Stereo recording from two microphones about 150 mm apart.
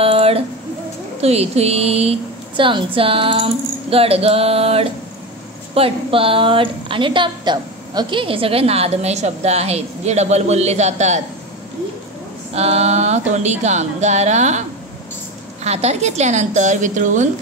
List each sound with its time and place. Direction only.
0.0 s a sound: 40° right (ahead or behind)
1.2 s a woman's voice: 45° right (ahead or behind)
12.5 s speech: 45° right (ahead or behind)
15.6 s speech: 45° right (ahead or behind)